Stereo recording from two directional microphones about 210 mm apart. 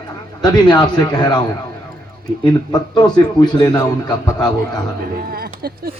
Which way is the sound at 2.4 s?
20° left (ahead or behind).